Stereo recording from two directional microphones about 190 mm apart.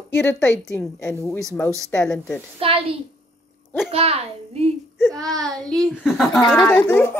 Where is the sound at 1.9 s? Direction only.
5° left (ahead or behind).